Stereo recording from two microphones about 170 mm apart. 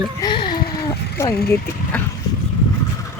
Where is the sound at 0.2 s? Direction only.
25° left (ahead or behind).